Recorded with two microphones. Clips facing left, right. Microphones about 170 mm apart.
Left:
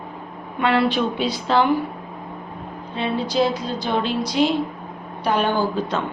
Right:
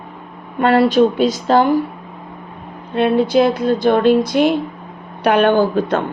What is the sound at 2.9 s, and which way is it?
Speech, 60° right (ahead or behind).